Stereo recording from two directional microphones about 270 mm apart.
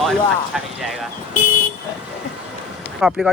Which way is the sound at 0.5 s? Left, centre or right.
Centre.